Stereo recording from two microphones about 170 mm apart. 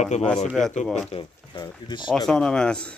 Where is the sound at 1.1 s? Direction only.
30° left (ahead or behind).